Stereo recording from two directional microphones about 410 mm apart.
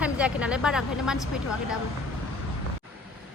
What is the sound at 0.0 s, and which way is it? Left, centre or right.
A woman's voice, centre.